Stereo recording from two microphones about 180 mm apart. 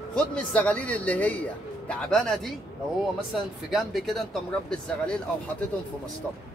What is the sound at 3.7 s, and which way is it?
A man's voice, centre (ahead or behind).